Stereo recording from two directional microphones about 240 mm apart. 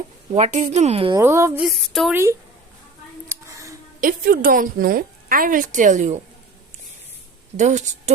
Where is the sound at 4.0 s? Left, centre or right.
Right.